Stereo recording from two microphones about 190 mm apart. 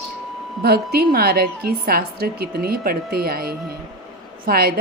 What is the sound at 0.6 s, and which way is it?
A woman's voice, 55° right (ahead or behind).